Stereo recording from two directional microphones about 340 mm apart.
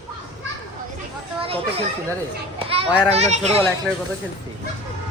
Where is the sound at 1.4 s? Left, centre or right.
Centre.